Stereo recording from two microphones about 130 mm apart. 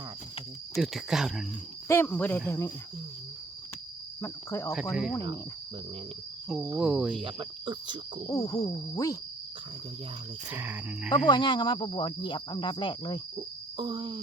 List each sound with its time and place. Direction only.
0.8 s speech: 5° right (ahead or behind)
1.9 s speech: 15° left (ahead or behind)
4.2 s speech: 20° left (ahead or behind)
4.7 s speech: 5° right (ahead or behind)
6.7 s speech: 5° right (ahead or behind)
7.2 s cricket: 40° right (ahead or behind)
8.3 s speech: 25° left (ahead or behind)
10.5 s speech: 15° right (ahead or behind)
11.3 s speech: 35° left (ahead or behind)
13.7 s cricket: 35° right (ahead or behind)